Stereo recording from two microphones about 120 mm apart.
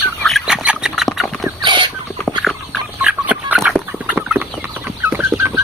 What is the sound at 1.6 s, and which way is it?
Rodents, 40° right (ahead or behind).